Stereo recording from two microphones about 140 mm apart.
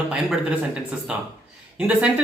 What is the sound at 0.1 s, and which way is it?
Speech, 5° right (ahead or behind).